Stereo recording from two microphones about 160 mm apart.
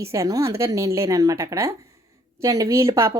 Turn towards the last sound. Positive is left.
turn(degrees=-15)  # may be behind; listen again after turning